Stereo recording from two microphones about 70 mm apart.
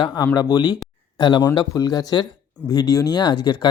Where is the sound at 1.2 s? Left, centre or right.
Left.